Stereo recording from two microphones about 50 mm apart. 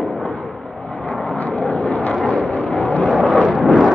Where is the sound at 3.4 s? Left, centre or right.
Centre.